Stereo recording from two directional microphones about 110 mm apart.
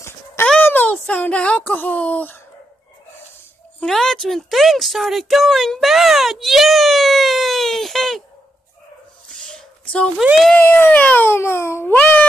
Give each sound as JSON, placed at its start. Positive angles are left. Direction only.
{"t": 0.5, "sound": "speech", "side_deg": 15}
{"t": 3.8, "sound": "speech", "side_deg": 5}
{"t": 9.3, "sound": "a sound", "side_deg": 5}
{"t": 10.5, "sound": "speech", "side_deg": 20}